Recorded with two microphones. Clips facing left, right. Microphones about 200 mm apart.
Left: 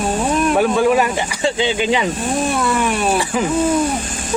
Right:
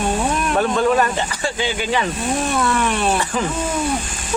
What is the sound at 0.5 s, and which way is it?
Speech, 10° left (ahead or behind).